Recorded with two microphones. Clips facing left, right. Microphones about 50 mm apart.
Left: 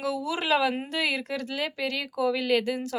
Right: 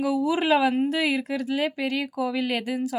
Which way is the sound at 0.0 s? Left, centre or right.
Centre.